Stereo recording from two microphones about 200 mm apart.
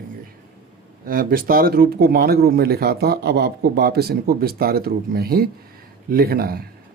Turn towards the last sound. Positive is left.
turn(degrees=-50)  # may be behind; listen again after turning